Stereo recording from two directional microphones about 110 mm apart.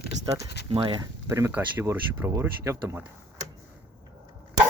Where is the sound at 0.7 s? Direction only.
50° right (ahead or behind).